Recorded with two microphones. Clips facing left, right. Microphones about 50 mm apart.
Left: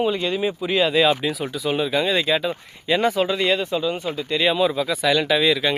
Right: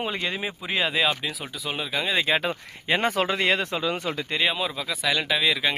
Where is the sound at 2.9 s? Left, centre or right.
Right.